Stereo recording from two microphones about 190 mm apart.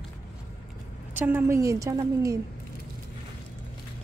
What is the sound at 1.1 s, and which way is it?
A woman's voice, 10° right (ahead or behind).